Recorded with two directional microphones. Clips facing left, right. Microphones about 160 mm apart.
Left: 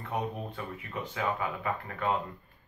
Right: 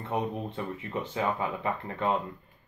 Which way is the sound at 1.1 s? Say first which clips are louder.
Right 2 dB; 25° right (ahead or behind).